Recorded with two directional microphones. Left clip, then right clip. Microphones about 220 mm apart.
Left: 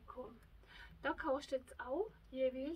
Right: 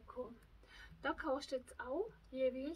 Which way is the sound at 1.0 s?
20° right (ahead or behind).